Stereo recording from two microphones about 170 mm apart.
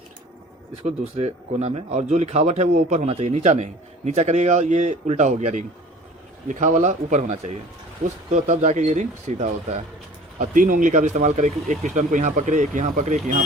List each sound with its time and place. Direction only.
0.9 s speech: 40° right (ahead or behind)